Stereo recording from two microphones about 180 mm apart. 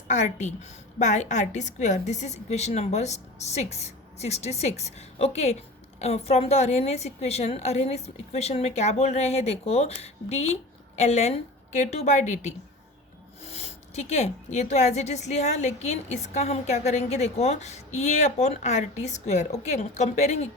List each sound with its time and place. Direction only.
0.1 s a woman's voice: 40° left (ahead or behind)